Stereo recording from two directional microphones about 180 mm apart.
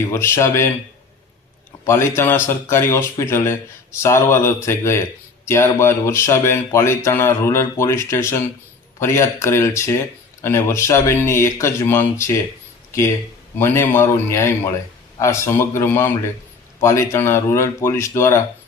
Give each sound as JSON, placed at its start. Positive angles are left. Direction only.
{"t": 0.1, "sound": "speech", "side_deg": 15}
{"t": 1.8, "sound": "speech", "side_deg": 15}
{"t": 13.6, "sound": "speech", "side_deg": 15}